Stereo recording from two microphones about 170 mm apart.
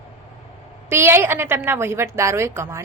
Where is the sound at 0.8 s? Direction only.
15° right (ahead or behind).